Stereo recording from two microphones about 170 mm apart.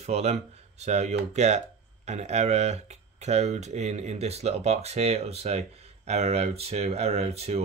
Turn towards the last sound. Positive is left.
turn(degrees=-40)  # may be behind; listen again after turning